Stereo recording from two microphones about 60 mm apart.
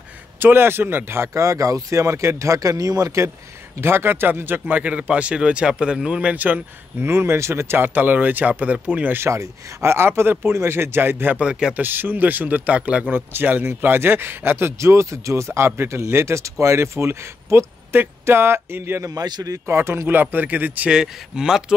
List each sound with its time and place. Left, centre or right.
0.4 s speech: right
3.8 s speech: right; by 6.3 s centre
6.3 s speech: right
7.1 s speech: right
9.2 s speech: right
11.3 s speech: centre
11.7 s speech: right
13.1 s speech: right
14.8 s speech: right
19.0 s a man's voice: right
19.7 s speech: right
20.9 s speech: centre